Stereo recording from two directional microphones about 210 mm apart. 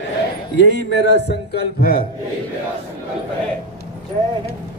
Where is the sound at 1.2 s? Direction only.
50° left (ahead or behind).